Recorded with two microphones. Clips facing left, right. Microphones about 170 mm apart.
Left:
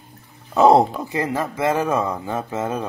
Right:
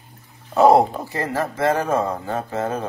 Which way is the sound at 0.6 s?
20° left (ahead or behind).